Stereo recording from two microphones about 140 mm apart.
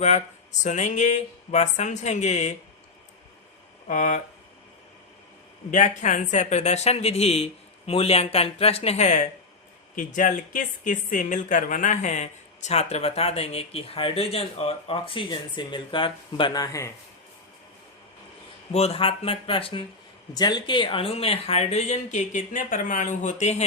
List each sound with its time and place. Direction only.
0.6 s speech: 60° left (ahead or behind)
3.8 s speech: 60° left (ahead or behind)
5.7 s speech: 60° left (ahead or behind)
9.9 s speech: 70° left (ahead or behind); by 16.6 s 35° left (ahead or behind)
18.7 s speech: 45° left (ahead or behind)
20.3 s speech: 30° left (ahead or behind); by 23.6 s 55° left (ahead or behind)